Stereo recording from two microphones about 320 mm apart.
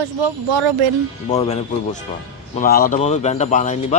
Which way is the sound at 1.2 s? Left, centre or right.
Centre.